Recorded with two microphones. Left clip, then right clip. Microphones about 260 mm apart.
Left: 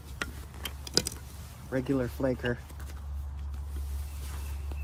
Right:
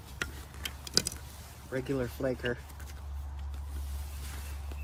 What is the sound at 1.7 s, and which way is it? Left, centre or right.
Speech, left.